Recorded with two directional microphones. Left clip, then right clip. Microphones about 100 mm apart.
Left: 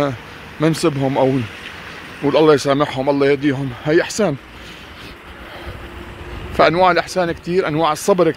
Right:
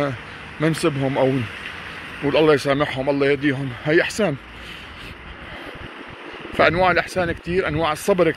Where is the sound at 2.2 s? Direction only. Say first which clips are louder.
Left 4 dB; 50° left (ahead or behind).